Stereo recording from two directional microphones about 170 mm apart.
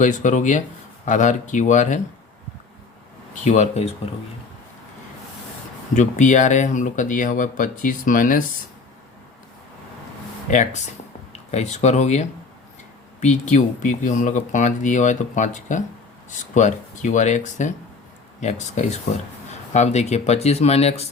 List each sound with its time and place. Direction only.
0.0 s speech: 50° left (ahead or behind)
3.4 s speech: 40° left (ahead or behind)
5.9 s speech: 45° left (ahead or behind)
10.5 s speech: 45° left (ahead or behind)